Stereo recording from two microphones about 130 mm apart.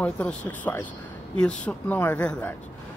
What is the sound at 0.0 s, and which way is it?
Speech, 10° left (ahead or behind).